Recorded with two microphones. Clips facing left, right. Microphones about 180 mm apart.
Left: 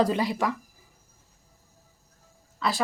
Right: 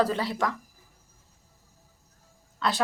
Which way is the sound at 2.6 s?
Centre (ahead or behind).